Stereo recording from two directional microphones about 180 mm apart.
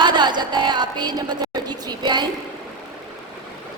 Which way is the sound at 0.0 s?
25° right (ahead or behind).